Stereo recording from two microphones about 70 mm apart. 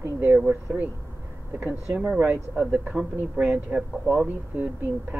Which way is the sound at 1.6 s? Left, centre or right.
Right.